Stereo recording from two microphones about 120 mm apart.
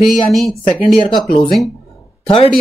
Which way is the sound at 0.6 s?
45° left (ahead or behind).